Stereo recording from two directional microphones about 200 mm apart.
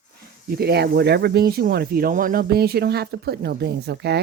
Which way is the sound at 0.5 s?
55° right (ahead or behind).